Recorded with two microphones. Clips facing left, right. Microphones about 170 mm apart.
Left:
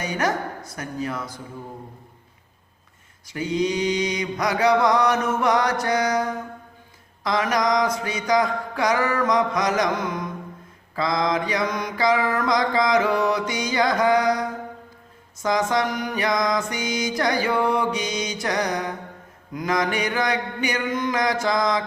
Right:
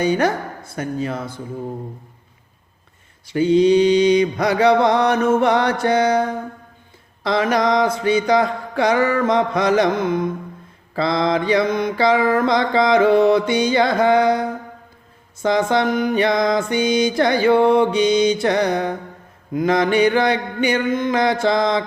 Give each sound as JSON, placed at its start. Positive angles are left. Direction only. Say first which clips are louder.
{"t": 0.0, "sound": "mantra", "louder": "right 6 dB", "side_deg": -30}
{"t": 3.2, "sound": "mantra", "louder": "right 10 dB", "side_deg": -30}